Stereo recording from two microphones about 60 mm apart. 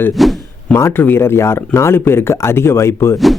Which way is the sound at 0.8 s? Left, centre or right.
Left.